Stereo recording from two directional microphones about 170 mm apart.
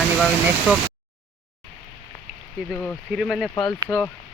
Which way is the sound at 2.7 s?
5° left (ahead or behind).